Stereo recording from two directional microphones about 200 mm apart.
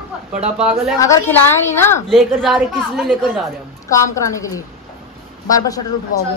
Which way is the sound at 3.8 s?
15° left (ahead or behind).